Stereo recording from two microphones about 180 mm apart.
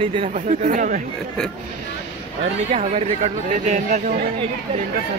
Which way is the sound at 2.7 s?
40° right (ahead or behind).